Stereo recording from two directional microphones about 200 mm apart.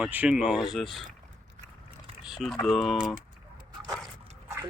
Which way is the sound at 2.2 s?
Centre (ahead or behind).